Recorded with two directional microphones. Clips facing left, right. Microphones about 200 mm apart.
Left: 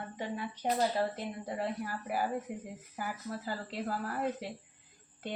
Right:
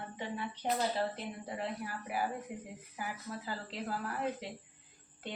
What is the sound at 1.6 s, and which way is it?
Speech, 40° left (ahead or behind).